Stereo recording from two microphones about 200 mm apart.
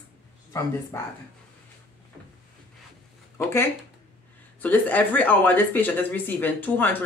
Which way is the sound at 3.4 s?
15° left (ahead or behind).